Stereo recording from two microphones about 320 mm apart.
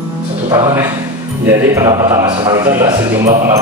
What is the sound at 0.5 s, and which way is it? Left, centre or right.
Speech, centre.